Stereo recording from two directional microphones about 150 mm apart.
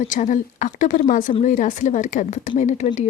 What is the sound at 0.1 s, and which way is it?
A woman's voice, 55° left (ahead or behind).